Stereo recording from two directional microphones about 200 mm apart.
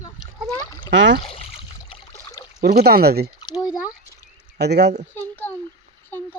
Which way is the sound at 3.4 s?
20° left (ahead or behind).